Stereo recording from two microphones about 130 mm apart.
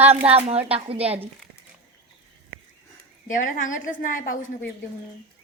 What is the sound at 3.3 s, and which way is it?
A woman's voice, 90° left.